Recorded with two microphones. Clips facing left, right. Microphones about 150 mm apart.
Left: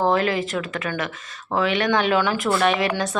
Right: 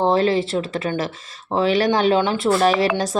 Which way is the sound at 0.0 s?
30° right (ahead or behind).